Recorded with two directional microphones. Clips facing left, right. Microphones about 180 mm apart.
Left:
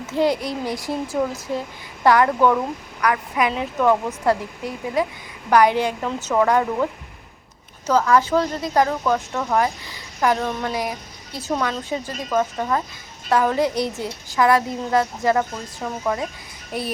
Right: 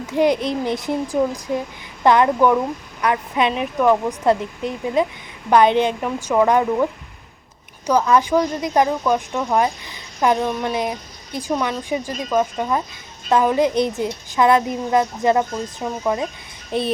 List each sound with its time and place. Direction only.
0.0 s speech: 15° right (ahead or behind)
7.9 s speech: 20° right (ahead or behind)